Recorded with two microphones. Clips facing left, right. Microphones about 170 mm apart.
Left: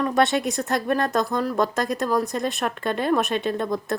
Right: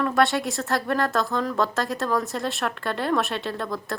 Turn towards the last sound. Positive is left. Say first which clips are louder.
# left 5 dB
turn(degrees=20)  # may be behind; listen again after turning